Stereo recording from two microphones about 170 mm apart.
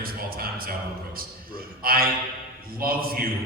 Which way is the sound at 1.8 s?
60° right (ahead or behind).